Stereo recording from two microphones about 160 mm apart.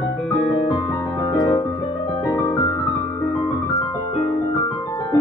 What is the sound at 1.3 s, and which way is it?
Music, 25° left (ahead or behind).